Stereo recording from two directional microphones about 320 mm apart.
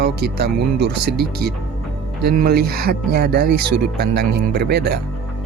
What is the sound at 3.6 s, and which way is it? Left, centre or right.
Speech, right.